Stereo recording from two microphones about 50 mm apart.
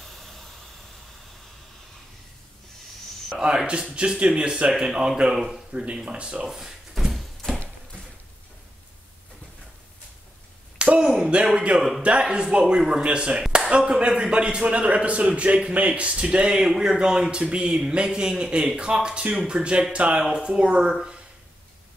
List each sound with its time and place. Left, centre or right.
0.0 s vehicle: centre
3.3 s speech: centre
5.3 s speech: centre
5.8 s speech: centre
6.4 s a sound: centre
10.8 s a sound: centre
11.2 s speech: centre
16.4 s speech: centre